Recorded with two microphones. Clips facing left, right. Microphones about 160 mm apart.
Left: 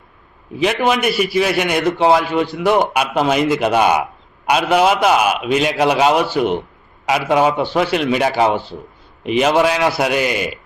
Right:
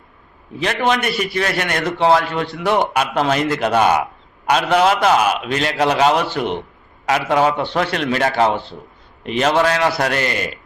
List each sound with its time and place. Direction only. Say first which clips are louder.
0.6 s a man's voice: left 3 dB; 5° left (ahead or behind)